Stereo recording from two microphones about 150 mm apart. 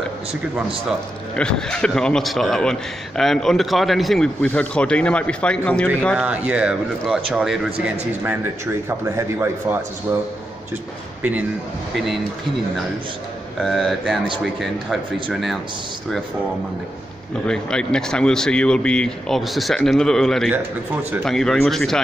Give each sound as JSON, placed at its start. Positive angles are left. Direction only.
{"t": 0.8, "sound": "a man's voice", "side_deg": 5}
{"t": 6.1, "sound": "a man's voice", "side_deg": -10}
{"t": 13.6, "sound": "a man's voice", "side_deg": 0}
{"t": 17.5, "sound": "a man's voice", "side_deg": 5}
{"t": 20.5, "sound": "speech", "side_deg": -10}
{"t": 21.2, "sound": "a man's voice", "side_deg": 5}